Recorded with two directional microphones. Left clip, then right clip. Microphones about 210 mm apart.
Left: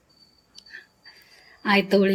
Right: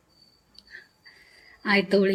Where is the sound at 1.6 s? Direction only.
15° left (ahead or behind).